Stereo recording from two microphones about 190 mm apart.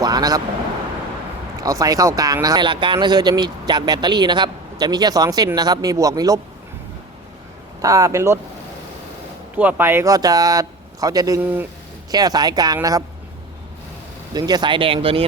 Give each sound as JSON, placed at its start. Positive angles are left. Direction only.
{"t": 0.0, "sound": "a sound", "side_deg": -20}
{"t": 1.6, "sound": "speech", "side_deg": -20}
{"t": 7.8, "sound": "speech", "side_deg": -15}
{"t": 9.6, "sound": "speech", "side_deg": -10}
{"t": 12.1, "sound": "speech", "side_deg": -20}
{"t": 14.3, "sound": "speech", "side_deg": -20}